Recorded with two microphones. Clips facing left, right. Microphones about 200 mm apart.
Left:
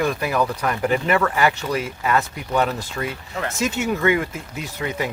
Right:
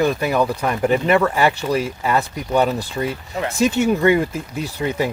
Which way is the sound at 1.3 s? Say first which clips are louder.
Right 3 dB; 30° right (ahead or behind).